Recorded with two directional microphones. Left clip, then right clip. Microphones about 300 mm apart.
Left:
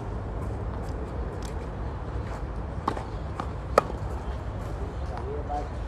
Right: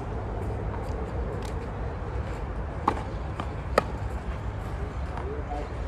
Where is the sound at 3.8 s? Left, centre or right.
Centre.